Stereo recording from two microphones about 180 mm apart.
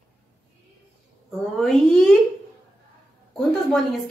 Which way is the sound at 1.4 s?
Centre (ahead or behind).